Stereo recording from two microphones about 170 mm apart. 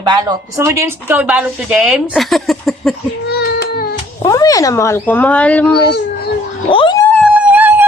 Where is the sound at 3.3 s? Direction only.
70° left (ahead or behind).